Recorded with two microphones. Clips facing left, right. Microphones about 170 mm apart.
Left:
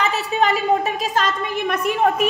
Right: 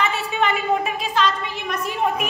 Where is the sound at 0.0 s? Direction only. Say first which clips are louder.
Left 2 dB; 35° left (ahead or behind); by 2.0 s 55° left (ahead or behind).